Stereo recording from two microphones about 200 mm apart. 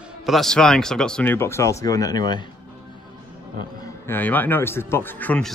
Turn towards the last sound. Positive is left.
turn(degrees=5)  # may be behind; listen again after turning